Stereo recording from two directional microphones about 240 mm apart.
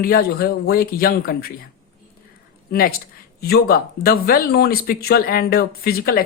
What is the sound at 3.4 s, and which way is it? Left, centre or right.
Speech, left.